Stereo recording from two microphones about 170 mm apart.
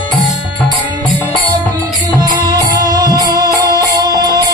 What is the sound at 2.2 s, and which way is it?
Music, 25° right (ahead or behind).